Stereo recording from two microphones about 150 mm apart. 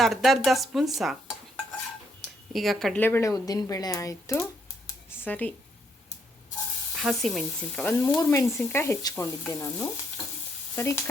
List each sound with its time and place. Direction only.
0.0 s dishes: centre (ahead or behind)
2.5 s speech: centre (ahead or behind)
3.0 s speech: 15° left (ahead or behind)
6.9 s speech: centre (ahead or behind)
7.9 s frying: 10° left (ahead or behind)